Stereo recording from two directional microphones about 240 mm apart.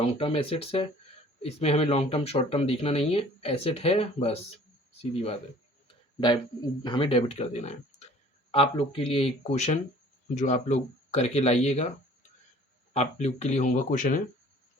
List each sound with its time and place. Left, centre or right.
0.0 s speech: left
12.9 s speech: left